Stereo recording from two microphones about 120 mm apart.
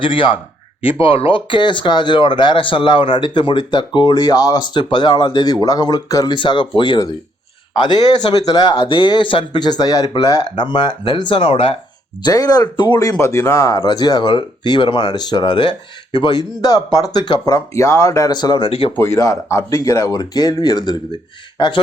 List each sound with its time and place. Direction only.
0.0 s speech: 45° left (ahead or behind)
8.7 s speech: 45° left (ahead or behind)
12.2 s speech: 30° left (ahead or behind)
13.1 s speech: 25° left (ahead or behind)
18.9 s speech: 25° left (ahead or behind)